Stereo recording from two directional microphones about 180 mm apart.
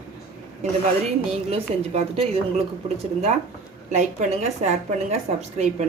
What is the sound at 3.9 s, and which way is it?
A woman's voice, 40° right (ahead or behind).